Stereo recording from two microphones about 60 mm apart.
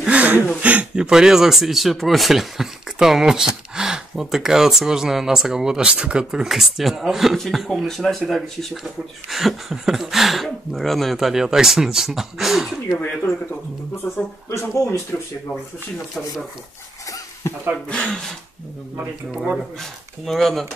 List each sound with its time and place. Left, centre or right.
0.0 s a sound: centre
0.6 s speech: right; by 12.8 s centre
14.0 s speech: left
17.8 s speech: centre
19.4 s speech: centre